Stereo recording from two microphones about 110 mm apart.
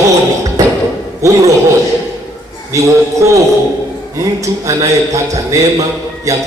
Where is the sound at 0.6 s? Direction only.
30° right (ahead or behind).